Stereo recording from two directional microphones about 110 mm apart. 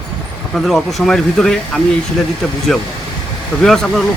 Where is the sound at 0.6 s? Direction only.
Centre (ahead or behind).